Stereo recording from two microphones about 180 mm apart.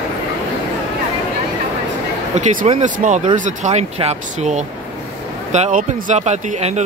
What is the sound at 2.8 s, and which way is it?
Speech, 40° right (ahead or behind).